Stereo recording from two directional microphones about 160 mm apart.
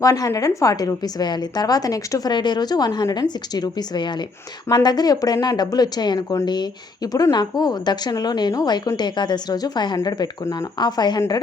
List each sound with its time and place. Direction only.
0.0 s speech: 20° left (ahead or behind)